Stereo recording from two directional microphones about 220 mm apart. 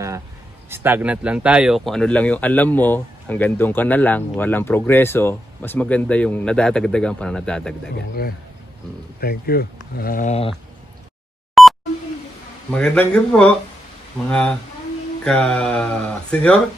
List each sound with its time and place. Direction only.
0.7 s speech: 10° right (ahead or behind)
9.2 s speech: 45° left (ahead or behind)
11.6 s beep: centre (ahead or behind)
12.7 s speech: 5° left (ahead or behind)